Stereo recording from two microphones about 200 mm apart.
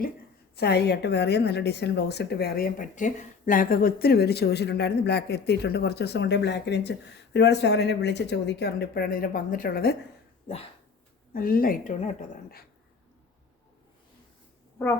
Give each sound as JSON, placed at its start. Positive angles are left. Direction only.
{"t": 0.5, "sound": "a woman's voice", "side_deg": 55}
{"t": 10.4, "sound": "speech", "side_deg": 30}
{"t": 11.3, "sound": "a woman's voice", "side_deg": 45}